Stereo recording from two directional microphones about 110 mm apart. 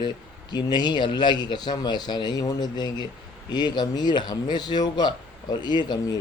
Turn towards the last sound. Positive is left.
turn(degrees=40)  # may be behind; listen again after turning